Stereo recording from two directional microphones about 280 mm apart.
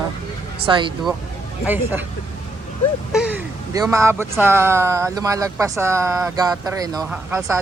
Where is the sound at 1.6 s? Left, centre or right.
Centre.